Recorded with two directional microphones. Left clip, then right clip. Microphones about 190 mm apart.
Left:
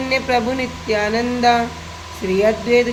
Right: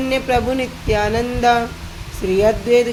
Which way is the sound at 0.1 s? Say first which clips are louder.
Even; 40° right (ahead or behind).